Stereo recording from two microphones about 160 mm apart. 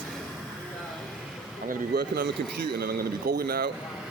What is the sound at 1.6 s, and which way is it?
A man's voice, 75° right (ahead or behind).